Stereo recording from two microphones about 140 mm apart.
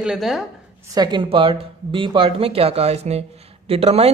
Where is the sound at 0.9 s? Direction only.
30° right (ahead or behind).